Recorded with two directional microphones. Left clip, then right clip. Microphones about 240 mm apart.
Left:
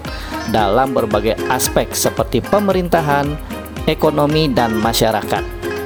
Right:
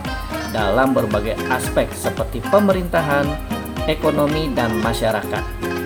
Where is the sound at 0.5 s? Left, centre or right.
Left.